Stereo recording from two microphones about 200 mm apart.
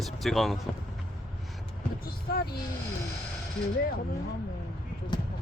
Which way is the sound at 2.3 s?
50° left (ahead or behind).